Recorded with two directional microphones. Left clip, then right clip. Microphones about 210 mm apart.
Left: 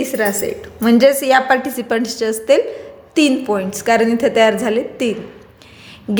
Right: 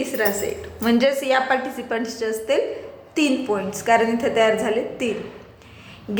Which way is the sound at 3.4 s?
50° left (ahead or behind).